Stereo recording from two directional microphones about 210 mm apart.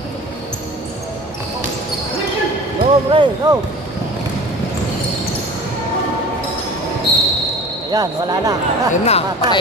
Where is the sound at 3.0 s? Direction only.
20° right (ahead or behind).